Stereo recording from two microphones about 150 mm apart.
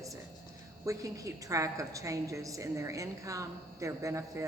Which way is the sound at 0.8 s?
20° right (ahead or behind).